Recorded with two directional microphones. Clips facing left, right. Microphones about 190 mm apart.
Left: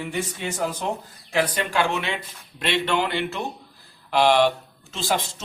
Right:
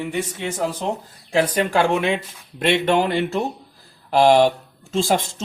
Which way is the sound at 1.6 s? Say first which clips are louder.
Right 6 dB; 50° right (ahead or behind).